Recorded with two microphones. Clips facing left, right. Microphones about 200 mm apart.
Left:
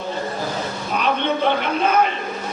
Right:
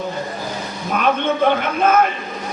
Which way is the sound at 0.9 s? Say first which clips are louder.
Right 3 dB; 50° right (ahead or behind).